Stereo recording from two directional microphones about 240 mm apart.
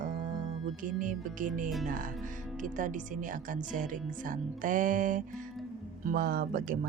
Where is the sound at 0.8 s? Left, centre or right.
Right.